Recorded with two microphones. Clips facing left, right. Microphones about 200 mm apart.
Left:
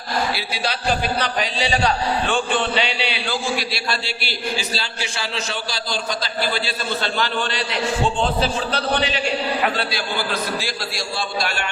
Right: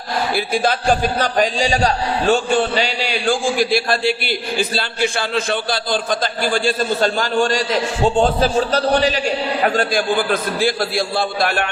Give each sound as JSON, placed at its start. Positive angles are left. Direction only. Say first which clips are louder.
{"t": 0.3, "sound": "a man's voice", "louder": "right 8 dB", "side_deg": -50}